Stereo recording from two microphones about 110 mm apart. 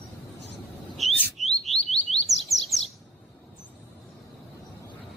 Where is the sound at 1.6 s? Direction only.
Centre (ahead or behind).